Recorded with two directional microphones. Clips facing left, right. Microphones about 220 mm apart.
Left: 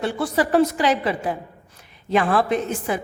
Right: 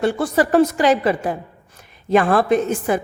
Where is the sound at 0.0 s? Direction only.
45° right (ahead or behind).